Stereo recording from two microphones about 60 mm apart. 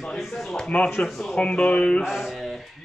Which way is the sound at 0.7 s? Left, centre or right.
Left.